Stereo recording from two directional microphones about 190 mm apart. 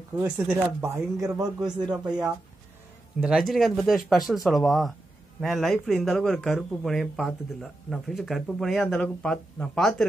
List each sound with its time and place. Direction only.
0.1 s a man's voice: 10° right (ahead or behind)
3.2 s speech: 5° right (ahead or behind)